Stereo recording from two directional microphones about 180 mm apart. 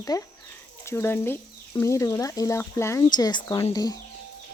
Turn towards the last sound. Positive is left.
turn(degrees=20)  # may be behind; listen again after turning